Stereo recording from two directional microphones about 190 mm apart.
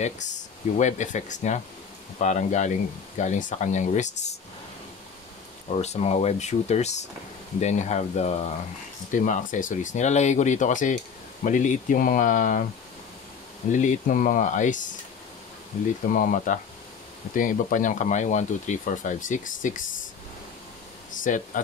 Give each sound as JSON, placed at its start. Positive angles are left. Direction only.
{"t": 0.0, "sound": "speech", "side_deg": 40}
{"t": 5.7, "sound": "speech", "side_deg": 35}
{"t": 13.7, "sound": "speech", "side_deg": 40}
{"t": 16.1, "sound": "speech", "side_deg": 45}
{"t": 21.3, "sound": "speech", "side_deg": 45}